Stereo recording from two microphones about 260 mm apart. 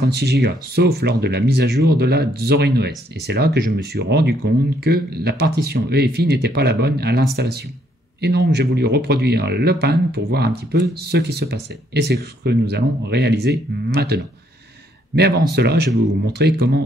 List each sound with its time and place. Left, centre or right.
0.0 s a man's voice: right